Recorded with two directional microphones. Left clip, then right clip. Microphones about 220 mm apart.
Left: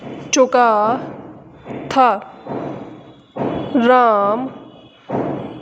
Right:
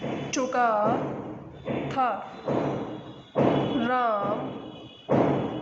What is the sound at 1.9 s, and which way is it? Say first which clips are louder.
Speech: left 14 dB; 50° left (ahead or behind).